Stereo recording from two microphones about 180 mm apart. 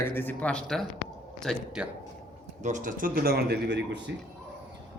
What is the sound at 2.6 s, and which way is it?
A man's voice, 45° right (ahead or behind).